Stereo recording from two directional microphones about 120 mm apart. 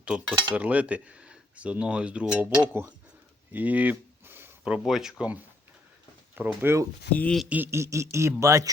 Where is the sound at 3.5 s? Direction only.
15° right (ahead or behind).